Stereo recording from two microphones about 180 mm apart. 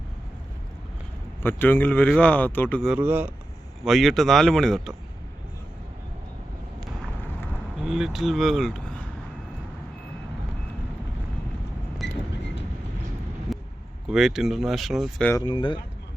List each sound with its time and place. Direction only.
1.4 s speech: 10° left (ahead or behind)
2.9 s speech: 10° right (ahead or behind)
3.8 s speech: centre (ahead or behind)
7.8 s speech: 5° right (ahead or behind)
12.0 s a sound: 70° left (ahead or behind)
13.5 s vehicle: centre (ahead or behind)
14.1 s speech: centre (ahead or behind)
15.4 s speech: 25° left (ahead or behind)